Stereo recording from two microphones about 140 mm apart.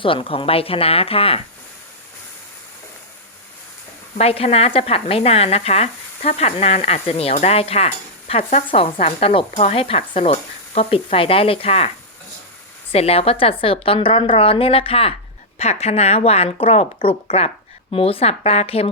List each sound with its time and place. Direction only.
0.0 s speech: 40° left (ahead or behind)
4.2 s speech: 45° left (ahead or behind)
12.9 s a woman's voice: 45° left (ahead or behind)